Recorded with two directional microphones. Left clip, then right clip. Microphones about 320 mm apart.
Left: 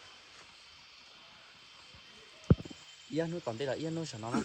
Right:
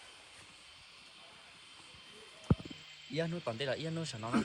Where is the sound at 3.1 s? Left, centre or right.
Left.